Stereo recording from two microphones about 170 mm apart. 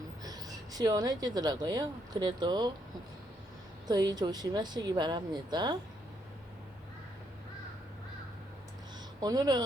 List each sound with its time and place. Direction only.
0.2 s speech: 20° right (ahead or behind)
3.8 s speech: 25° right (ahead or behind)
9.2 s speech: 25° right (ahead or behind)